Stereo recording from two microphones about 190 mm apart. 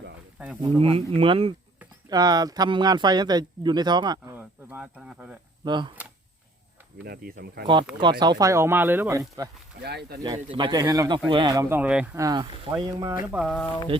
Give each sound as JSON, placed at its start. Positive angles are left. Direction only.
{"t": 0.8, "sound": "speech", "side_deg": -30}
{"t": 4.4, "sound": "speech", "side_deg": -10}
{"t": 5.6, "sound": "speech", "side_deg": -25}
{"t": 7.0, "sound": "speech", "side_deg": -50}
{"t": 7.9, "sound": "speech", "side_deg": -5}
{"t": 8.2, "sound": "speech", "side_deg": -20}
{"t": 9.8, "sound": "speech", "side_deg": -60}
{"t": 10.2, "sound": "speech", "side_deg": -25}
{"t": 11.7, "sound": "speech", "side_deg": -5}
{"t": 13.5, "sound": "speech", "side_deg": 5}